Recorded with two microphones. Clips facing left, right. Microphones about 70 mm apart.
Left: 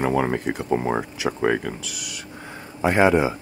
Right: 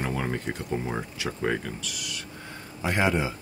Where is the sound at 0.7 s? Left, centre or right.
Left.